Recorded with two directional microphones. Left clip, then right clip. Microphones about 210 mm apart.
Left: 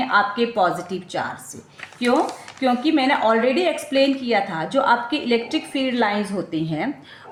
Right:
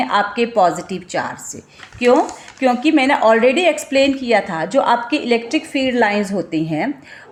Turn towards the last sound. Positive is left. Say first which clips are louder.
# right 5 dB
turn(degrees=-25)  # may be behind; listen again after turning